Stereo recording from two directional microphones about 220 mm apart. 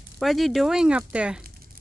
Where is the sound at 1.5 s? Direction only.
45° right (ahead or behind).